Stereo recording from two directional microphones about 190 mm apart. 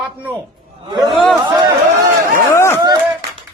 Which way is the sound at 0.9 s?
25° right (ahead or behind).